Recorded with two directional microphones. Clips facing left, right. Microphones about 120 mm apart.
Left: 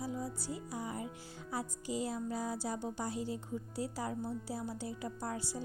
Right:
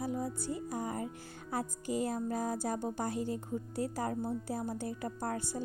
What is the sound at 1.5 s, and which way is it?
A woman's voice, 50° right (ahead or behind).